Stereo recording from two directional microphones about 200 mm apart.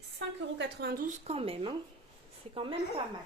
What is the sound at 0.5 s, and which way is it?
A woman's voice, 50° right (ahead or behind).